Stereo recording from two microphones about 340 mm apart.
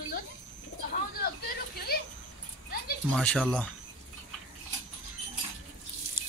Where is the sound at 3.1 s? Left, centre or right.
Centre.